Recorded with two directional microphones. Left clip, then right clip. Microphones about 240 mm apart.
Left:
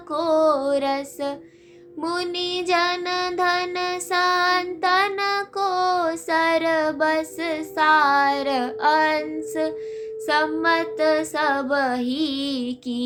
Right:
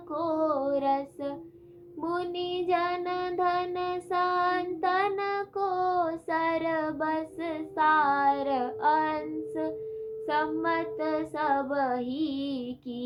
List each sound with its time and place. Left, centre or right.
0.1 s music: left
2.0 s child singing: left